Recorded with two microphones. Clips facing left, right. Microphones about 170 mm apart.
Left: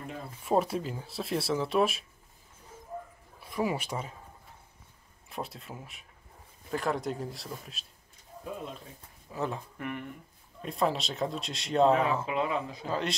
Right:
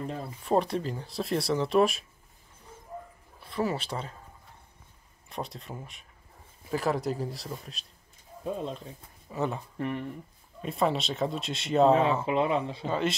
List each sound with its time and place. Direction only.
0.5 s speech: 5° left (ahead or behind)
3.4 s speech: 10° left (ahead or behind)
5.3 s speech: centre (ahead or behind)
9.3 s speech: centre (ahead or behind)
9.8 s speech: 30° right (ahead or behind)
10.6 s speech: centre (ahead or behind)
11.9 s speech: 25° right (ahead or behind)
12.8 s speech: centre (ahead or behind)